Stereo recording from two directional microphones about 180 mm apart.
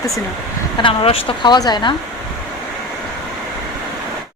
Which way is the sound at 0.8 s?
30° left (ahead or behind).